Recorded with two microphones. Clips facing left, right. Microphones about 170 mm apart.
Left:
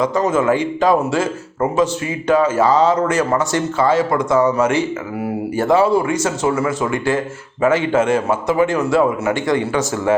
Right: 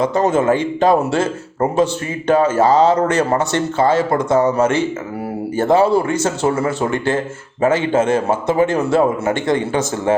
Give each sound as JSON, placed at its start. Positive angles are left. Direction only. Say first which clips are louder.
{"t": 0.3, "sound": "a man's voice", "louder": "right 1 dB", "side_deg": -30}